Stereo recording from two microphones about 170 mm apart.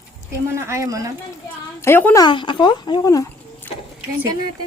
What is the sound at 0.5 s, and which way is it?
Speech, 15° right (ahead or behind).